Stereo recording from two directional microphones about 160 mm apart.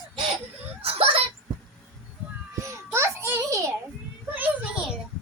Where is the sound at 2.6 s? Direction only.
15° right (ahead or behind).